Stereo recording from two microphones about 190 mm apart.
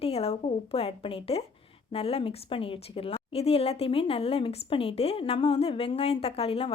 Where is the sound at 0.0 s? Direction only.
30° left (ahead or behind).